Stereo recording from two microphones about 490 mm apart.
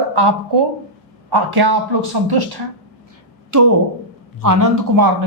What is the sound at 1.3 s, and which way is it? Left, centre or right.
A man's voice, right.